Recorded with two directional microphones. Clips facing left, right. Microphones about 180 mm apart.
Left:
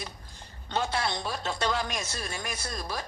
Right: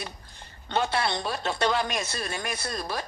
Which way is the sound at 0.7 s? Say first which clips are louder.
Right 3 dB; 65° right (ahead or behind).